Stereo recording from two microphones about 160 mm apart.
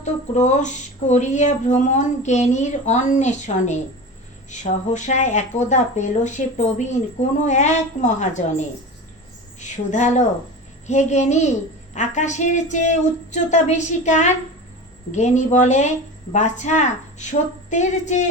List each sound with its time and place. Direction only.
0.0 s speech: 45° left (ahead or behind)